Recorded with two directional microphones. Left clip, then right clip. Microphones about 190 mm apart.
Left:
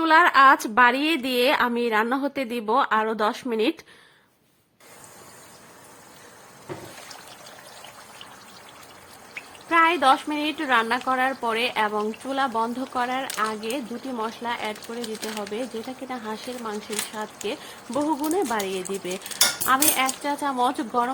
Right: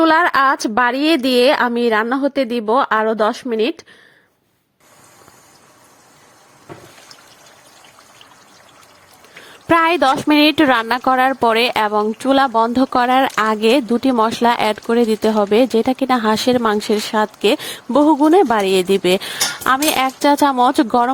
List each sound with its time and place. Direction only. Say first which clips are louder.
0.0 s a woman's voice: right 3 dB; 35° right (ahead or behind)
9.6 s speech: right 5 dB; 60° right (ahead or behind)